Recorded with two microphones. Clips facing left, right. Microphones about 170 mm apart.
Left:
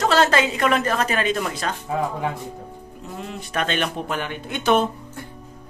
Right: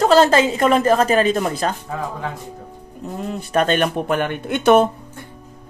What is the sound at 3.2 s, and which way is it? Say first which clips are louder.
Speech: right 7 dB; 40° right (ahead or behind).